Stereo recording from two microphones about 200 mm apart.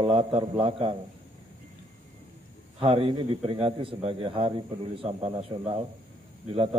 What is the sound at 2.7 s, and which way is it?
A man's voice, 25° right (ahead or behind).